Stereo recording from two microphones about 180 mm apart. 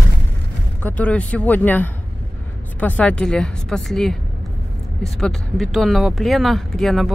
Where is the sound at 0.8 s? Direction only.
10° left (ahead or behind).